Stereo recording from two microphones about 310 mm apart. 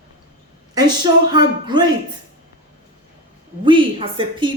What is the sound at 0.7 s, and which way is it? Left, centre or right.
A man's voice, centre.